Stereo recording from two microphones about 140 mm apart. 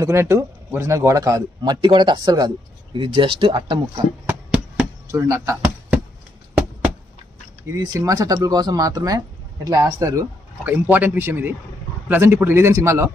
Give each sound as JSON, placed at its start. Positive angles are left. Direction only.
{"t": 0.0, "sound": "a man's voice", "side_deg": -20}
{"t": 4.3, "sound": "a sound", "side_deg": -10}
{"t": 5.1, "sound": "speech", "side_deg": -20}
{"t": 7.7, "sound": "speech", "side_deg": -25}
{"t": 10.7, "sound": "speech", "side_deg": -10}